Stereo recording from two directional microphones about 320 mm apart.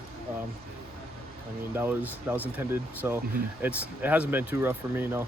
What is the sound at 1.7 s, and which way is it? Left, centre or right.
Speech, centre.